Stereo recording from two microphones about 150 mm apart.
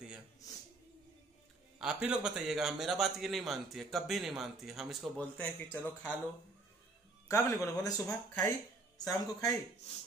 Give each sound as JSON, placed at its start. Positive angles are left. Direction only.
{"t": 1.8, "sound": "a man's voice", "side_deg": -5}
{"t": 5.2, "sound": "speech", "side_deg": 10}
{"t": 7.2, "sound": "speech", "side_deg": 20}